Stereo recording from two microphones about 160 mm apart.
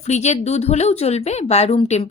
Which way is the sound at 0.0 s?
45° left (ahead or behind).